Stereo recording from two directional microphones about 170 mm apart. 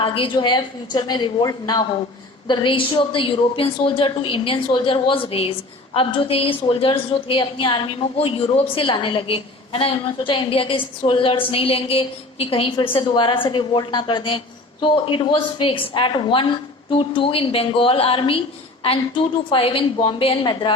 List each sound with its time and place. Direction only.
0.0 s a woman's voice: 30° left (ahead or behind)